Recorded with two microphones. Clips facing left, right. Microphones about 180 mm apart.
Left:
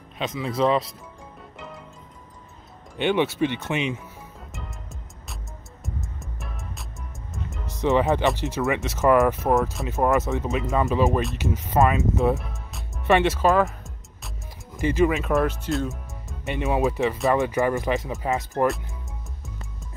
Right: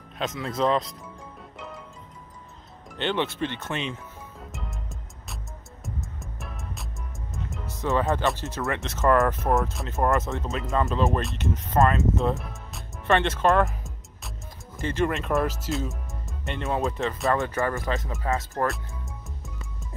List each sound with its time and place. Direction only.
0.2 s speech: centre (ahead or behind)
3.0 s speech: 10° left (ahead or behind)
4.5 s music: centre (ahead or behind)
7.8 s speech: 15° left (ahead or behind)
12.4 s music: centre (ahead or behind)
14.8 s speech: 10° left (ahead or behind)
16.5 s speech: 15° left (ahead or behind)